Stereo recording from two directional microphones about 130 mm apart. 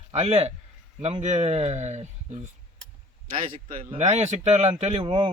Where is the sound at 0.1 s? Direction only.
55° right (ahead or behind).